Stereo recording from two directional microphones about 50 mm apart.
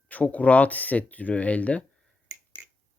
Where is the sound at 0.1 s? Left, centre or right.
Left.